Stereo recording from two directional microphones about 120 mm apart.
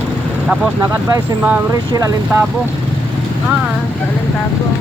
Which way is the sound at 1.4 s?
10° right (ahead or behind).